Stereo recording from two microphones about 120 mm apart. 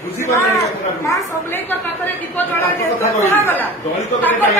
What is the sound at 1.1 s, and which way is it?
Speech, 25° left (ahead or behind).